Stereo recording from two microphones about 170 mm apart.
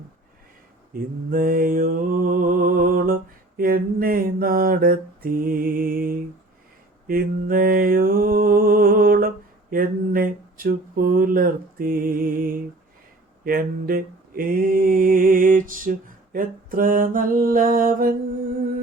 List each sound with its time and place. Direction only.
0.9 s mantra: 55° right (ahead or behind)